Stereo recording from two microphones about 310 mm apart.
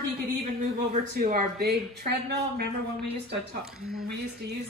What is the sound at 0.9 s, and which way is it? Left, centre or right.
A woman's voice, right.